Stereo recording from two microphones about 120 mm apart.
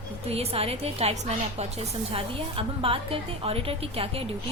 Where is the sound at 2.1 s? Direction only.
50° right (ahead or behind).